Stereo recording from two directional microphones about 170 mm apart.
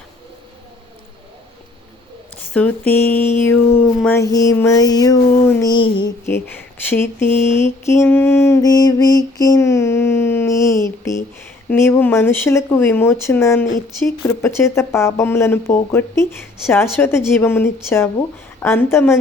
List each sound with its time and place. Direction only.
2.5 s speech: 10° left (ahead or behind)
4.3 s a sound: 20° left (ahead or behind)
6.2 s speech: 15° left (ahead or behind)